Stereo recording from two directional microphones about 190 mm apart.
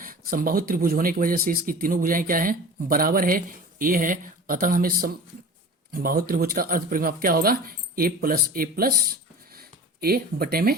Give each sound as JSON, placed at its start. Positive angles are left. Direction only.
{"t": 0.0, "sound": "speech", "side_deg": -45}